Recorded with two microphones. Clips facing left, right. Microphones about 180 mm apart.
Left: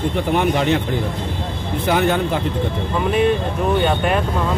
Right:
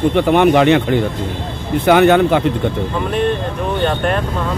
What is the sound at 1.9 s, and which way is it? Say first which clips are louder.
Speech: right 8 dB; 75° right (ahead or behind).